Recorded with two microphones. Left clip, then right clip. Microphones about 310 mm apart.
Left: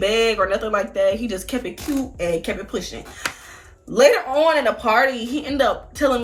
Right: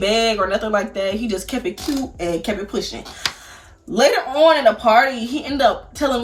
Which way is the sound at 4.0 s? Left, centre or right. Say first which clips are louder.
Even; centre.